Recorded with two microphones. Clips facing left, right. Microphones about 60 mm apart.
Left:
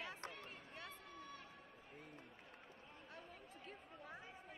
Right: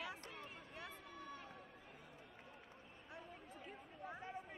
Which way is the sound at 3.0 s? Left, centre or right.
Centre.